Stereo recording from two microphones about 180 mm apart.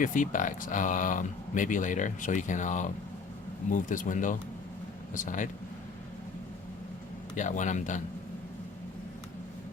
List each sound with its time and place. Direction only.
0.0 s speech: 45° left (ahead or behind)
7.3 s speech: 45° left (ahead or behind)